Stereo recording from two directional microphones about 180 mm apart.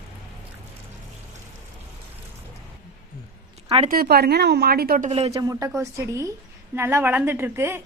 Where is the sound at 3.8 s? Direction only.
55° right (ahead or behind).